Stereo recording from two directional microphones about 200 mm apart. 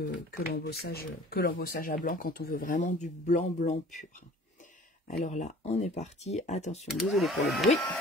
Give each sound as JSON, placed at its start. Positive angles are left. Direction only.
{"t": 0.1, "sound": "speech", "side_deg": 55}
{"t": 5.0, "sound": "speech", "side_deg": 35}
{"t": 6.9, "sound": "speech", "side_deg": 0}